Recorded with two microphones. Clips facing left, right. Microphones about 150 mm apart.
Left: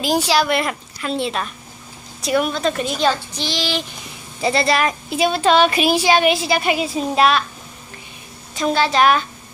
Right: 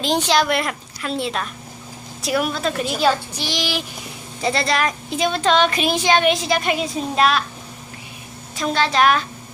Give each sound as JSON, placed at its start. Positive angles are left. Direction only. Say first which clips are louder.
{"t": 0.0, "sound": "speech", "louder": "left 1 dB", "side_deg": 10}
{"t": 4.4, "sound": "speech", "louder": "left 3 dB", "side_deg": 5}
{"t": 8.5, "sound": "speech", "louder": "left 2 dB", "side_deg": 5}